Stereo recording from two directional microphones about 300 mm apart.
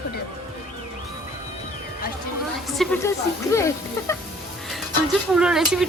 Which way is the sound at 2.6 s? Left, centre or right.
Centre.